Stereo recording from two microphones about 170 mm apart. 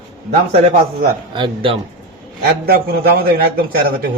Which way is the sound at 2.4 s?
65° right (ahead or behind).